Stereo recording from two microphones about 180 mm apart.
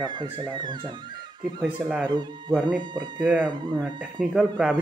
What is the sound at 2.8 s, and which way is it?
Speech, 25° right (ahead or behind).